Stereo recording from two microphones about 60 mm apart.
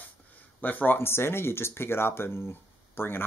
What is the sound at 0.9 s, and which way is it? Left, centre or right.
Speech, left.